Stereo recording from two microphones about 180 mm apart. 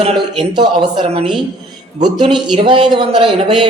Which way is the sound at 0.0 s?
25° right (ahead or behind).